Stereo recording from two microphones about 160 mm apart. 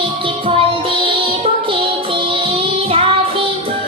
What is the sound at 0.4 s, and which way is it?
Music, 35° right (ahead or behind).